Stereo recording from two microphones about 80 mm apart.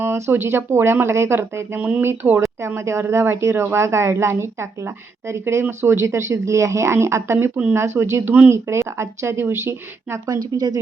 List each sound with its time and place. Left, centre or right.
0.0 s speech: right
10.2 s speech: right